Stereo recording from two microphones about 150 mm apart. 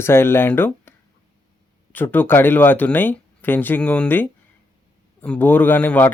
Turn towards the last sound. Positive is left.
turn(degrees=10)  # may be behind; listen again after turning